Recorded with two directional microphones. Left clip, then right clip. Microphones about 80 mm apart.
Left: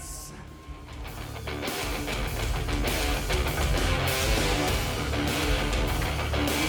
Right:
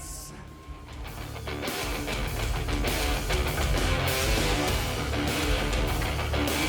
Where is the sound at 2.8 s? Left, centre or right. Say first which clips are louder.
Even; left.